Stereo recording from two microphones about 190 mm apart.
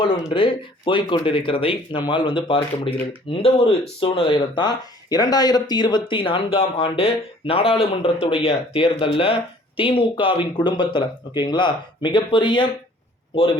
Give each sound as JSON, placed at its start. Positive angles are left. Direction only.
{"t": 0.3, "sound": "speech", "side_deg": 25}